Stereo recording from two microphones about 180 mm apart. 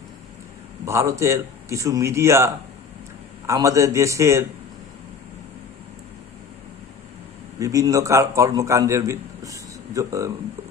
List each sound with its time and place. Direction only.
0.9 s a man's voice: 15° right (ahead or behind)
7.6 s a man's voice: 20° right (ahead or behind)